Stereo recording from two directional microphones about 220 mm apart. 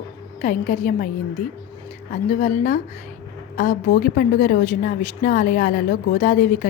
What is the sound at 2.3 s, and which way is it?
A woman's voice, 35° left (ahead or behind).